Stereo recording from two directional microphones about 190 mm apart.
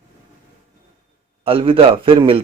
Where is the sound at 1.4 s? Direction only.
30° right (ahead or behind).